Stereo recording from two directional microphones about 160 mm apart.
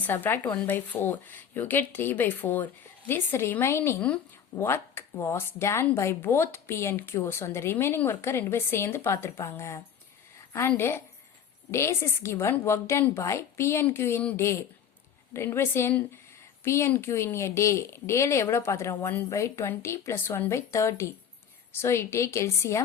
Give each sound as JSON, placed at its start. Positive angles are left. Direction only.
{"t": 0.0, "sound": "speech", "side_deg": 10}